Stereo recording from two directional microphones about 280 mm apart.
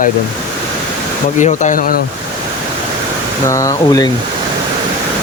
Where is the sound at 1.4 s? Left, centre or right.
Left.